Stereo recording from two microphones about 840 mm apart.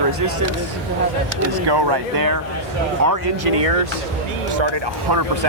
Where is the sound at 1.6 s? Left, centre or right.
Right.